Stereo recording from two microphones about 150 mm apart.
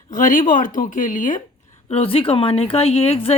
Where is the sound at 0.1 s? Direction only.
60° left (ahead or behind).